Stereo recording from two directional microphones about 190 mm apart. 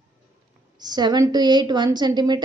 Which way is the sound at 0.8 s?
20° right (ahead or behind).